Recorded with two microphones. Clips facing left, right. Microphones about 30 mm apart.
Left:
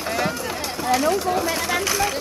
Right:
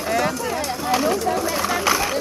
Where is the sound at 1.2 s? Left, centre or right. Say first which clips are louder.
Right 1 dB; centre.